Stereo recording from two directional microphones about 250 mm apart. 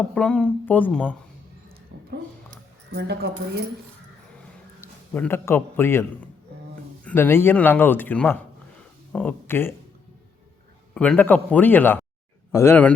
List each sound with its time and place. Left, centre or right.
0.1 s speech: centre
2.9 s speech: right
4.8 s a man's voice: centre
10.9 s a man's voice: centre